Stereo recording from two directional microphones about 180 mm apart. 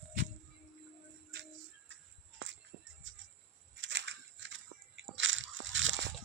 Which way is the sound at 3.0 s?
90° right.